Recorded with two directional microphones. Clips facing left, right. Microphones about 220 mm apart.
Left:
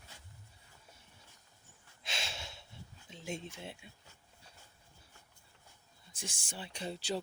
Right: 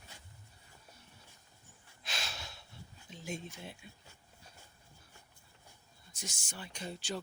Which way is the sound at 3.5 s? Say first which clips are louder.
Left 1 dB; 25° left (ahead or behind).